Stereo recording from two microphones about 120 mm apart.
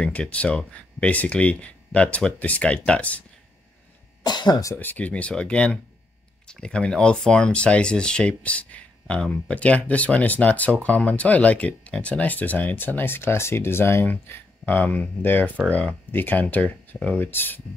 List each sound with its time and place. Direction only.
0.0 s speech: 10° left (ahead or behind)
4.2 s speech: 35° left (ahead or behind)
4.7 s speech: 15° left (ahead or behind)